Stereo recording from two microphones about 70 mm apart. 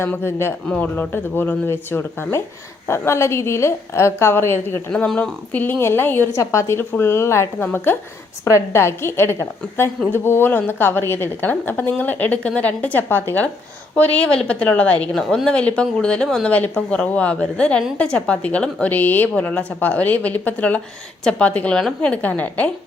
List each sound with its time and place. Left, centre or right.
0.0 s a woman's voice: left
0.7 s a woman's voice: left
5.1 s a woman's voice: left
5.8 s a woman's voice: left
6.3 s a woman's voice: left
7.6 s a woman's voice: left
8.5 s a woman's voice: left
13.9 s speech: left
15.1 s speech: centre
16.5 s a woman's voice: left